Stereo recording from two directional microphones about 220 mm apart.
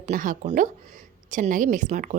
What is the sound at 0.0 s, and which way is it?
A woman's voice, 35° right (ahead or behind).